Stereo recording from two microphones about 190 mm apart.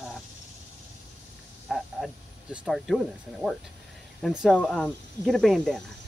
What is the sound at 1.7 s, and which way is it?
Speech, centre (ahead or behind).